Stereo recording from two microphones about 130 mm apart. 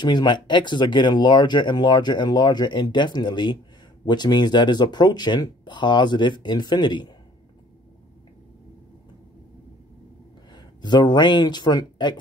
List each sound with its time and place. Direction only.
0.0 s speech: 35° left (ahead or behind)
10.5 s speech: 35° left (ahead or behind)